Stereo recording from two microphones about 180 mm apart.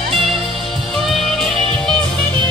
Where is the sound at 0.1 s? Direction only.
Centre (ahead or behind).